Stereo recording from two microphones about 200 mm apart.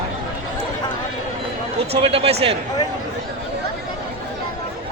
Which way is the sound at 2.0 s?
30° right (ahead or behind).